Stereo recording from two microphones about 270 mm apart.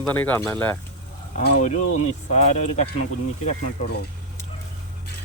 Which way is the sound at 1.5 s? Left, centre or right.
Left.